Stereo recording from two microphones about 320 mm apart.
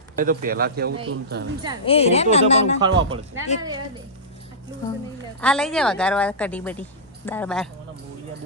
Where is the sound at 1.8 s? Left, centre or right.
Centre.